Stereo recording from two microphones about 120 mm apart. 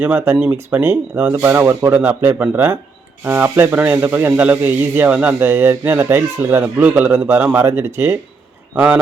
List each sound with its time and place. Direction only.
0.0 s speech: 15° right (ahead or behind)